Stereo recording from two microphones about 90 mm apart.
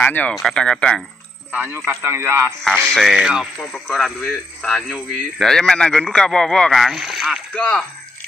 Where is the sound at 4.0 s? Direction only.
5° left (ahead or behind).